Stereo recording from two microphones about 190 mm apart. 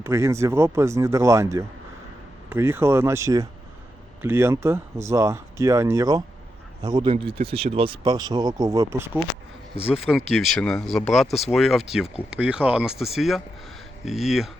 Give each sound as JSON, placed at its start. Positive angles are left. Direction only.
{"t": 0.0, "sound": "speech", "side_deg": -15}
{"t": 9.7, "sound": "speech", "side_deg": -5}